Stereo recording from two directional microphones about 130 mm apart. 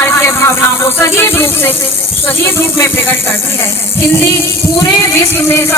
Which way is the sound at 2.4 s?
20° left (ahead or behind).